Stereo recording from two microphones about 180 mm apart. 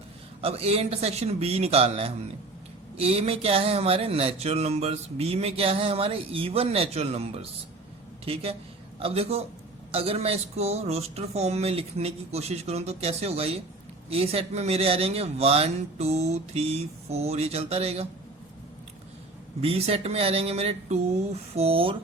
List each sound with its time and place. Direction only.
0.4 s speech: 35° right (ahead or behind)
19.6 s speech: 30° right (ahead or behind)